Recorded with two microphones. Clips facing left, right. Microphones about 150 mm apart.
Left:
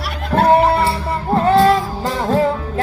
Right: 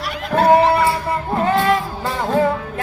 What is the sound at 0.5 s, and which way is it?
Music, 30° left (ahead or behind).